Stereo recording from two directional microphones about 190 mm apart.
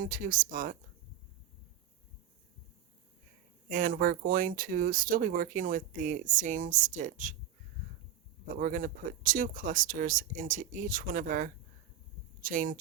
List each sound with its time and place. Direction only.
0.0 s speech: 45° right (ahead or behind)
3.7 s speech: 45° right (ahead or behind)
8.5 s speech: 45° right (ahead or behind)